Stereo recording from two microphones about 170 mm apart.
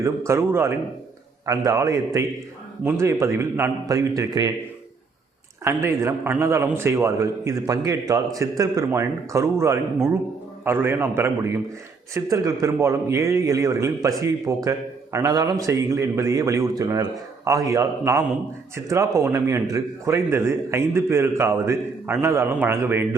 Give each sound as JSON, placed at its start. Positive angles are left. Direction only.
{"t": 0.0, "sound": "a man's voice", "side_deg": -15}
{"t": 5.6, "sound": "a man's voice", "side_deg": -15}